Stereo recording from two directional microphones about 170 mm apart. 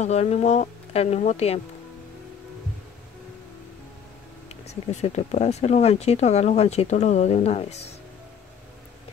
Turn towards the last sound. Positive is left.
turn(degrees=40)  # may be behind; listen again after turning